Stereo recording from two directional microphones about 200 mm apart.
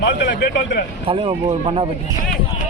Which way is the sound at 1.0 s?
30° right (ahead or behind).